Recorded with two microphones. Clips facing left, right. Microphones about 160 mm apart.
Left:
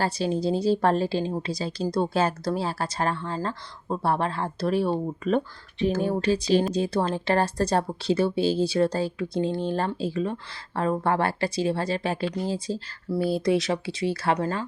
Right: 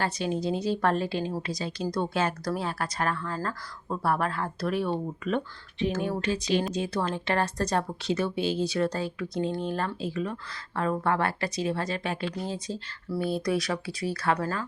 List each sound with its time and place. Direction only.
0.0 s speech: 35° left (ahead or behind)